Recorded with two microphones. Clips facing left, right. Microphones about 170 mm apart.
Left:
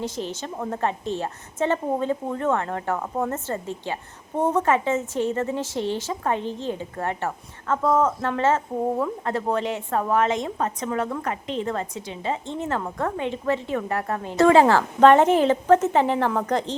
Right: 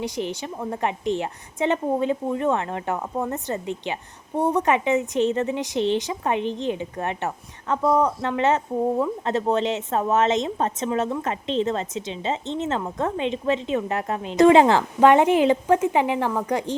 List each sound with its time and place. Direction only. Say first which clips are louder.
0.0 s a woman's voice: right 2 dB; 15° right (ahead or behind)